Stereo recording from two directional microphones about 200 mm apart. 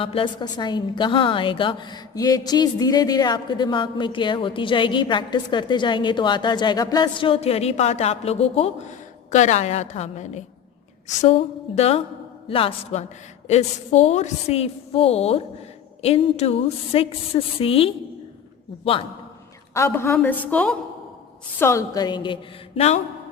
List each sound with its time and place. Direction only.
0.0 s a woman's voice: 25° left (ahead or behind)
19.7 s a woman's voice: 15° left (ahead or behind); by 23.0 s 30° left (ahead or behind)